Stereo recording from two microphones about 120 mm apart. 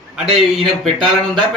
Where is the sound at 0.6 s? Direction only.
40° right (ahead or behind).